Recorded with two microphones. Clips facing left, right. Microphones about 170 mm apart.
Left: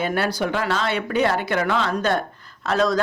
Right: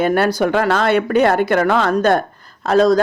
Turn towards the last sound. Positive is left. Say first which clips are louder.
# right 7 dB
turn(degrees=-35)  # may be behind; listen again after turning